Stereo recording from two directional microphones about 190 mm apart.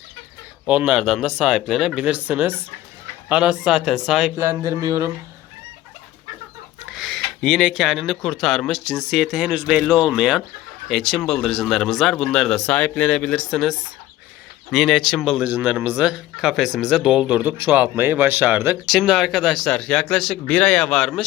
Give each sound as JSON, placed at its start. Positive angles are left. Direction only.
{"t": 0.6, "sound": "speech", "side_deg": -5}
{"t": 4.4, "sound": "speech", "side_deg": -15}
{"t": 6.9, "sound": "speech", "side_deg": 0}